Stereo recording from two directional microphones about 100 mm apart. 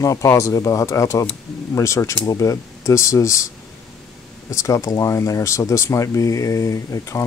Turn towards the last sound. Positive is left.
turn(degrees=30)  # may be behind; listen again after turning